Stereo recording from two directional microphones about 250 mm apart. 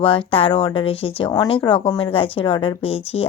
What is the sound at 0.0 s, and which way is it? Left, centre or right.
Speech, left.